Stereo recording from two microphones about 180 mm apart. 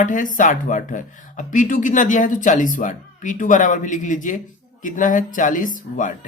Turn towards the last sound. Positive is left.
turn(degrees=50)  # may be behind; listen again after turning